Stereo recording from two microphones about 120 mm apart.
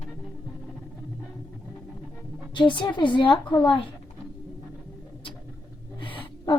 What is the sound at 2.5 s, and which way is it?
Speech, 40° left (ahead or behind).